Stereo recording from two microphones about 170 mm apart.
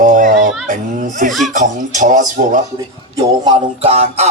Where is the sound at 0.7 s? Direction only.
45° right (ahead or behind).